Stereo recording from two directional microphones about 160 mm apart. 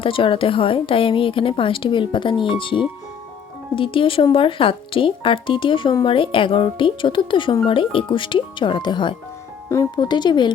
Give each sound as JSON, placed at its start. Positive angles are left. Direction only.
{"t": 0.0, "sound": "speech", "side_deg": 35}